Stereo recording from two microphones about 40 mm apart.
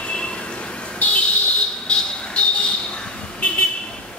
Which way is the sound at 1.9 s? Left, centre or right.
Left.